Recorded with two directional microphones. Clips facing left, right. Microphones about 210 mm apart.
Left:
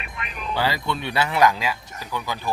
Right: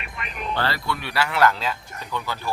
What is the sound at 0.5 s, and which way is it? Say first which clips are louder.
Speech: left 2 dB; 10° left (ahead or behind).